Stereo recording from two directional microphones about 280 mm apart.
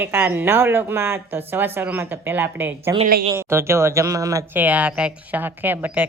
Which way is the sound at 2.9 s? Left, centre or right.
Right.